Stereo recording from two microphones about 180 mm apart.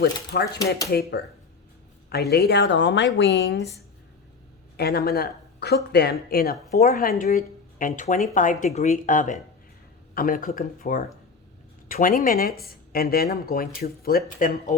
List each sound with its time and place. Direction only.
0.3 s speech: 60° left (ahead or behind)
2.3 s speech: 65° left (ahead or behind)
4.8 s speech: 60° left (ahead or behind); by 14.8 s 45° left (ahead or behind)